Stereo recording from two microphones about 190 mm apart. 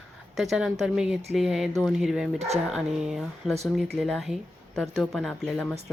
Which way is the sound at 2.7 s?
5° right (ahead or behind).